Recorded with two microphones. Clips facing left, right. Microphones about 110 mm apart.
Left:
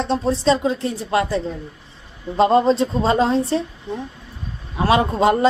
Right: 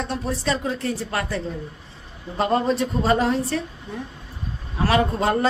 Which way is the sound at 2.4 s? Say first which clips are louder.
Left 6 dB; 25° left (ahead or behind).